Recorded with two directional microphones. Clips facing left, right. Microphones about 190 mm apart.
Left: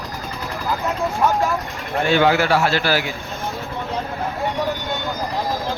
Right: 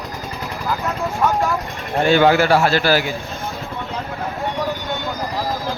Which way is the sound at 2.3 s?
40° right (ahead or behind).